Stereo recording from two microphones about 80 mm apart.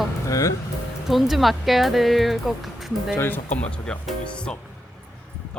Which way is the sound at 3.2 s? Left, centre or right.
Left.